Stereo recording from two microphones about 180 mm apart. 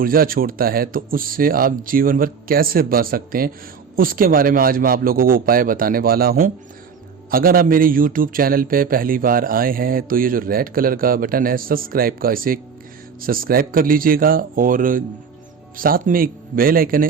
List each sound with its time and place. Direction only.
0.0 s a man's voice: 55° right (ahead or behind)